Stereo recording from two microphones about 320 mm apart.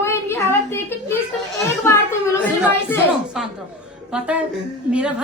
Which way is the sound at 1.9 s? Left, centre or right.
Centre.